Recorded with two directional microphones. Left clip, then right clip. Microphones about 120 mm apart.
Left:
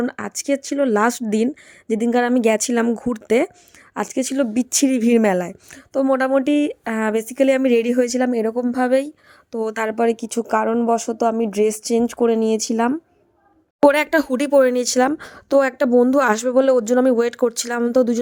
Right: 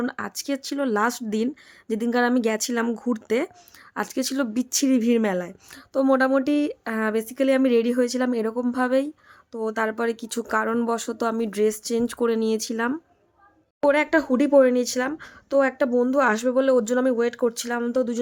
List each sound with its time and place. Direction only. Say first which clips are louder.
0.0 s a woman's voice: left 4 dB; 25° left (ahead or behind)
3.9 s speech: left 5 dB; 25° left (ahead or behind)
4.5 s a woman's voice: left 4 dB; 35° left (ahead or behind)
5.7 s speech: left 2 dB; 20° left (ahead or behind)
11.5 s speech: left 5 dB; 30° left (ahead or behind)
12.0 s speech: left 4 dB; 15° left (ahead or behind)
13.8 s speech: left 5 dB; 80° left; by 15.9 s 55° left (ahead or behind)
15.9 s speech: left 5 dB; 45° left (ahead or behind)